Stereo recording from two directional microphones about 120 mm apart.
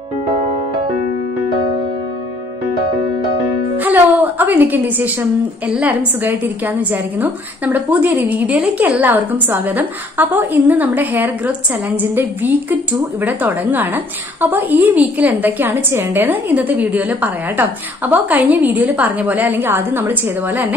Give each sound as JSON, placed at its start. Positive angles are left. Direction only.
{"t": 3.7, "sound": "music", "side_deg": -15}
{"t": 5.7, "sound": "a woman's voice", "side_deg": -10}